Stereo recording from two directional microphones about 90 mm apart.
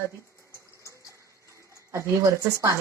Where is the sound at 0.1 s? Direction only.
35° right (ahead or behind).